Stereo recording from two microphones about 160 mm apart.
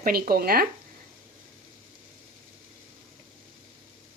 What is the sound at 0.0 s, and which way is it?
Speech, 70° right (ahead or behind).